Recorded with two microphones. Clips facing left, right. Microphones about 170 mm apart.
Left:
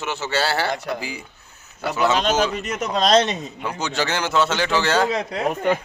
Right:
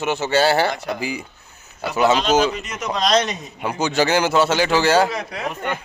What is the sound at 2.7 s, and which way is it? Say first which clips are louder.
Speech: left 2 dB; 30° left (ahead or behind).